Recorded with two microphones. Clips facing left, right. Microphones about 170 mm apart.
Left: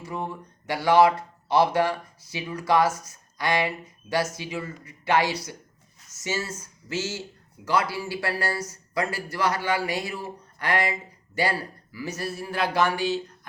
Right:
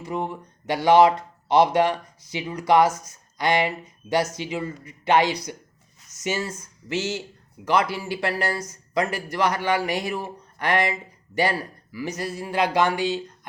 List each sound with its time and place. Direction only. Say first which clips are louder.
0.0 s speech: right 4 dB; 20° right (ahead or behind)